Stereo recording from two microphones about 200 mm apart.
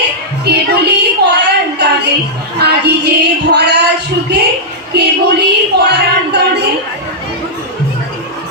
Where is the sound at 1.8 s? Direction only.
55° right (ahead or behind).